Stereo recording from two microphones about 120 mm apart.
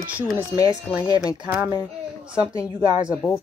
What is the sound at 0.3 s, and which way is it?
Speech, 30° left (ahead or behind).